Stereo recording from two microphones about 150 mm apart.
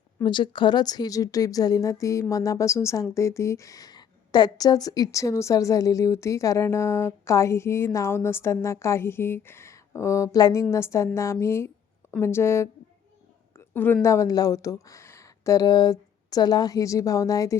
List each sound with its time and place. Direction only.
0.2 s a woman's voice: 30° left (ahead or behind)